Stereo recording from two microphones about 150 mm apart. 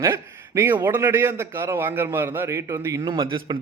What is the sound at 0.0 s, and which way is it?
A man's voice, 20° right (ahead or behind).